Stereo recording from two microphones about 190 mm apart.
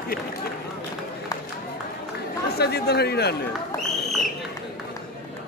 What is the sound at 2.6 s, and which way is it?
Speech, 60° left (ahead or behind).